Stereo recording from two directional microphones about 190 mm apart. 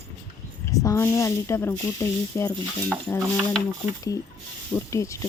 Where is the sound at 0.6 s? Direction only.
15° left (ahead or behind).